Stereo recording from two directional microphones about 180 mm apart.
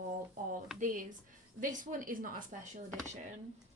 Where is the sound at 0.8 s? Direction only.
45° right (ahead or behind).